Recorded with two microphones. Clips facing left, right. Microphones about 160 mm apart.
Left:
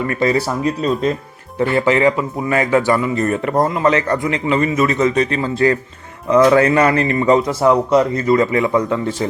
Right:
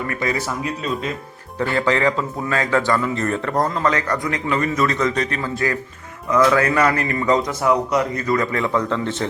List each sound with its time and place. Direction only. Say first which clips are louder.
0.1 s speech: left 8 dB; 30° left (ahead or behind)
1.5 s a man's voice: left 4 dB; 20° left (ahead or behind)